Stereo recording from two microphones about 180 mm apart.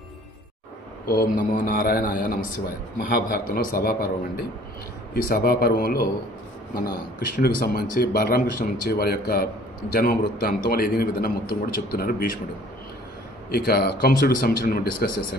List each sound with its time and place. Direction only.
1.0 s a man's voice: 55° left (ahead or behind)
13.5 s speech: 60° left (ahead or behind)